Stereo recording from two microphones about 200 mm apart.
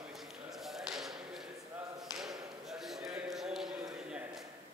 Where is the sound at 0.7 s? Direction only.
Centre (ahead or behind).